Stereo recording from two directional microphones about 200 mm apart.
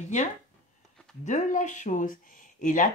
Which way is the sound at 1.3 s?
40° left (ahead or behind).